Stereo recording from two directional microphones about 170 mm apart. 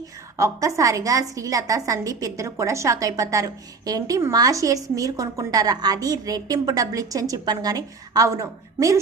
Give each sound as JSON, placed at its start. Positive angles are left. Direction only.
{"t": 0.3, "sound": "a woman's voice", "side_deg": -20}